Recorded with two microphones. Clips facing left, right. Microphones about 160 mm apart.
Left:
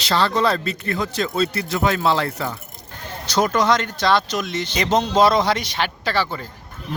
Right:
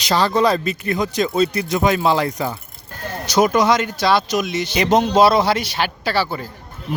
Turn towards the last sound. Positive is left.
turn(degrees=-5)  # may be behind; listen again after turning